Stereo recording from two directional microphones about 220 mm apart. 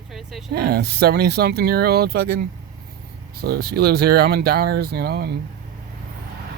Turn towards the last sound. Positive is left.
turn(degrees=-45)  # may be behind; listen again after turning